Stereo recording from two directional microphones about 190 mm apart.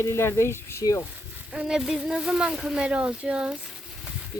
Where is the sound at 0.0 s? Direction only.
15° left (ahead or behind).